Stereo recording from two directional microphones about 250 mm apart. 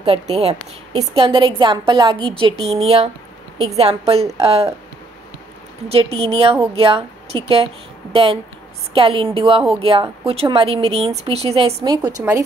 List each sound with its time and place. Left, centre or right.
0.0 s a woman's voice: right
5.9 s a woman's voice: right